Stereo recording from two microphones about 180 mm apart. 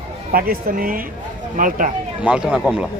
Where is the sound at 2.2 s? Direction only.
5° right (ahead or behind).